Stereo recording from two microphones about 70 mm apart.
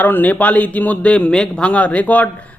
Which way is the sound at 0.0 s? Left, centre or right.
Left.